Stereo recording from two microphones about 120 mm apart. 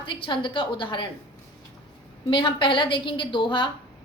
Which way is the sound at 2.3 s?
45° left (ahead or behind).